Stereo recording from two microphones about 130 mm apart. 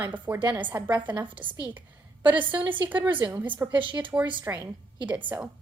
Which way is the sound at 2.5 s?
40° right (ahead or behind).